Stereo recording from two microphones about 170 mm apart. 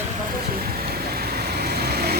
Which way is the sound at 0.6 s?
65° right (ahead or behind).